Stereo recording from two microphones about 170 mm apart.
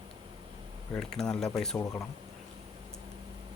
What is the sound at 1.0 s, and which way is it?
Speech, 5° left (ahead or behind).